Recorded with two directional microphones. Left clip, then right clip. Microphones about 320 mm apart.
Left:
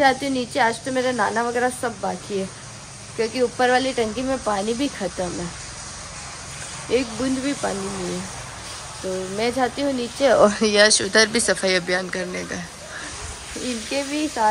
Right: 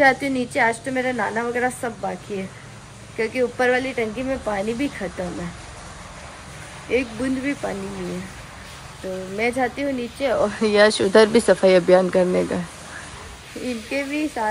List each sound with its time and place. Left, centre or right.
0.0 s a woman's voice: centre
3.2 s a woman's voice: centre
6.9 s speech: centre
9.4 s speech: centre
10.2 s speech: left
10.6 s a woman's voice: centre
13.9 s a woman's voice: centre